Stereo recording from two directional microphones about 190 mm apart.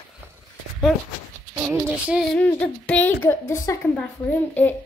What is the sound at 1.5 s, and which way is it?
Speech, 10° right (ahead or behind).